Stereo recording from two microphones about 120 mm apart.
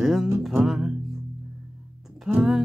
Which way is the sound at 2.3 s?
Centre (ahead or behind).